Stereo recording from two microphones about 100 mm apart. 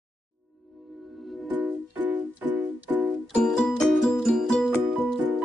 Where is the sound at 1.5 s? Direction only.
15° right (ahead or behind).